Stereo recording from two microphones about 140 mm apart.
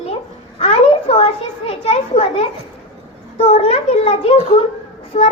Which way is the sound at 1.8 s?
45° left (ahead or behind).